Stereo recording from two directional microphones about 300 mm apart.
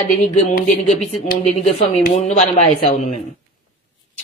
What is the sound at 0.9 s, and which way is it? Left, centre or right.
Speech, left.